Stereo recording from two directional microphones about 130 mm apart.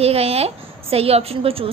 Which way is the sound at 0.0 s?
50° right (ahead or behind).